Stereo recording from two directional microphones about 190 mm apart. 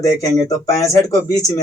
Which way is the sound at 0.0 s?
20° left (ahead or behind).